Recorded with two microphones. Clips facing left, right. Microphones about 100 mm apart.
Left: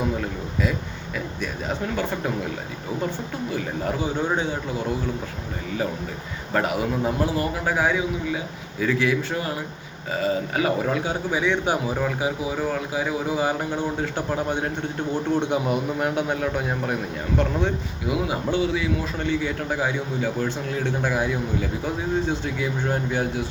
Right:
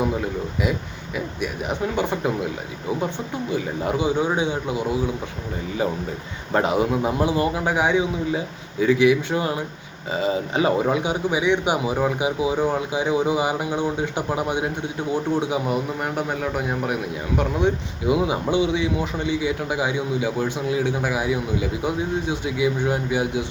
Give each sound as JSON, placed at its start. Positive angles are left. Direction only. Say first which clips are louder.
{"t": 0.6, "sound": "speech", "louder": "left 1 dB", "side_deg": -15}
{"t": 3.5, "sound": "speech", "louder": "right 3 dB", "side_deg": -20}
{"t": 6.5, "sound": "a man's voice", "louder": "right 3 dB", "side_deg": -20}
{"t": 18.1, "sound": "speech", "louder": "right 4 dB", "side_deg": -20}